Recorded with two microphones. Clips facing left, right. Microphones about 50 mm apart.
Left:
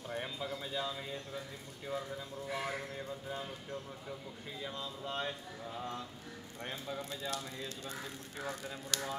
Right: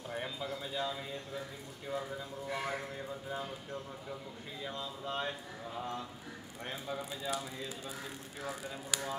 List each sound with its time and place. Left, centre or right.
0.1 s bird: centre
1.9 s speech: centre
4.6 s a sound: centre
6.6 s speech: centre